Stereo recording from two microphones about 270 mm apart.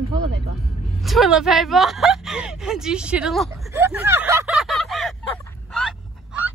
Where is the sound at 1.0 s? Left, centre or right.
Centre.